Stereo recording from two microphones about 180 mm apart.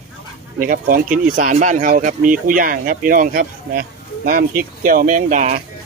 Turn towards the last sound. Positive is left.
turn(degrees=-50)  # may be behind; listen again after turning